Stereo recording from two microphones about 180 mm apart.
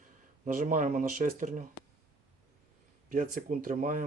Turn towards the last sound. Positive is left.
turn(degrees=-50)  # may be behind; listen again after turning